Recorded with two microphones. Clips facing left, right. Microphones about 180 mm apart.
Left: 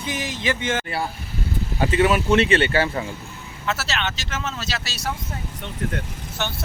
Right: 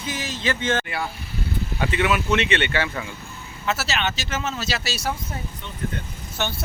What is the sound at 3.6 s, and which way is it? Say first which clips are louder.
Speech: right 1 dB; 5° right (ahead or behind).